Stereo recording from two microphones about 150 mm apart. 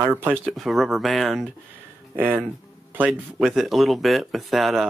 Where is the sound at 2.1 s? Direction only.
10° right (ahead or behind).